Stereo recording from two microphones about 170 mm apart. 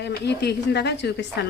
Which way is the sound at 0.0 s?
75° left (ahead or behind).